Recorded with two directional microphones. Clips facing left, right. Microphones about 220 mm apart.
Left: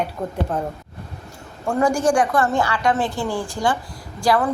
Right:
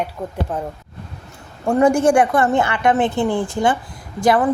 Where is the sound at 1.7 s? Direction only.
25° right (ahead or behind).